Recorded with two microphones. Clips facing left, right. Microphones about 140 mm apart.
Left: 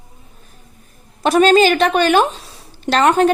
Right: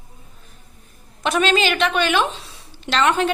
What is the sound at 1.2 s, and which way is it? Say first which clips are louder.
A woman's voice: left 8 dB; 40° left (ahead or behind).